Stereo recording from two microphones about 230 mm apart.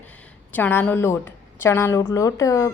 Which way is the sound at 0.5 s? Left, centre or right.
Centre.